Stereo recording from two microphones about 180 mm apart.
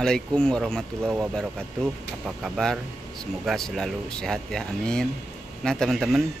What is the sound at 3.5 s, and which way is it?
Speech, centre (ahead or behind).